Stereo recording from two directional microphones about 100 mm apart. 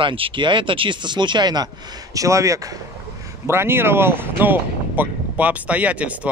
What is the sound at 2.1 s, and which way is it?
Speech, 30° right (ahead or behind).